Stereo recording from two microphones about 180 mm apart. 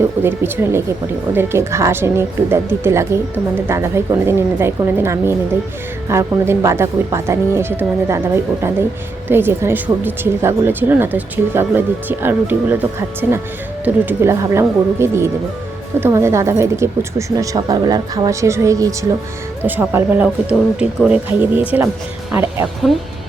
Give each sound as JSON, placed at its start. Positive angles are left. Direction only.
{"t": 0.2, "sound": "speech", "side_deg": -10}
{"t": 9.3, "sound": "speech", "side_deg": -15}